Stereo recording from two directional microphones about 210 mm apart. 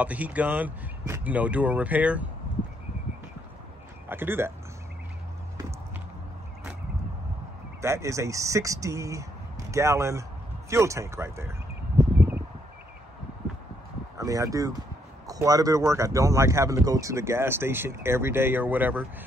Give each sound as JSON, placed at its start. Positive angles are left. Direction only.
{"t": 0.0, "sound": "speech", "side_deg": -5}
{"t": 4.1, "sound": "speech", "side_deg": -10}
{"t": 7.8, "sound": "speech", "side_deg": -15}
{"t": 12.0, "sound": "a sound", "side_deg": -10}
{"t": 14.1, "sound": "speech", "side_deg": -15}